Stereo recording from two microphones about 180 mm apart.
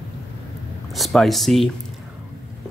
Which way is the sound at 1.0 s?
Centre (ahead or behind).